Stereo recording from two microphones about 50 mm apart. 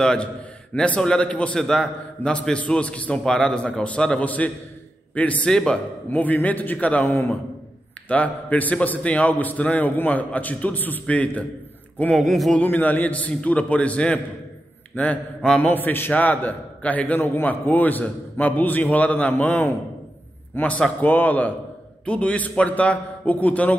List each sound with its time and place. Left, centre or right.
0.0 s a man's voice: centre
2.5 s a man's voice: left
5.5 s a man's voice: centre
6.0 s a man's voice: left
8.1 s a man's voice: left
12.2 s speech: centre
12.6 s a man's voice: left
15.6 s a man's voice: left
20.5 s a man's voice: left
21.0 s a man's voice: left